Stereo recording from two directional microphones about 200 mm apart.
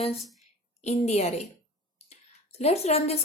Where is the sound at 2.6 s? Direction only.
30° left (ahead or behind).